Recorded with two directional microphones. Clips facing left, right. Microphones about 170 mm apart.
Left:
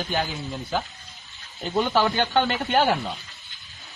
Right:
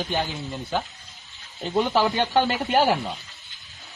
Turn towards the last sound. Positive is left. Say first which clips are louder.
# right 1 dB
turn(degrees=-5)  # may be behind; listen again after turning